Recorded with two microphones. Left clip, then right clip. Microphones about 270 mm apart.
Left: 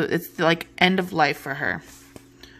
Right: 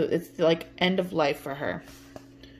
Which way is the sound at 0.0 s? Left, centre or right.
Left.